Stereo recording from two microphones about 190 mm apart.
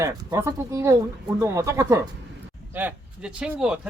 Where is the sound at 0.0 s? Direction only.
20° right (ahead or behind).